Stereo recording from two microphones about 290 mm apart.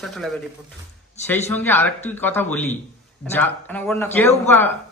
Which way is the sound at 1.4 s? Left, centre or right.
Centre.